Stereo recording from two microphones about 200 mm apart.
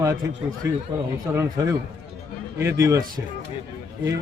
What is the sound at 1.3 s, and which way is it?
A man's voice, 15° right (ahead or behind).